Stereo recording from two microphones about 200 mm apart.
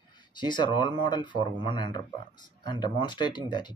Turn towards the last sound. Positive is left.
turn(degrees=20)  # may be behind; listen again after turning